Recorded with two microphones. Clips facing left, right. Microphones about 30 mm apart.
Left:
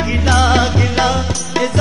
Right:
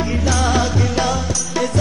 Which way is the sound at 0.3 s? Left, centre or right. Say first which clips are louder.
Left 6 dB; left.